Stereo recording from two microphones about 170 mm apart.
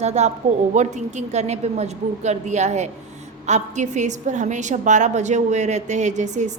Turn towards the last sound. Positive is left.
turn(degrees=-45)  # may be behind; listen again after turning